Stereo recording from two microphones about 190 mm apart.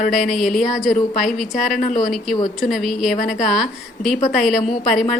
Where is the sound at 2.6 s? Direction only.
Centre (ahead or behind).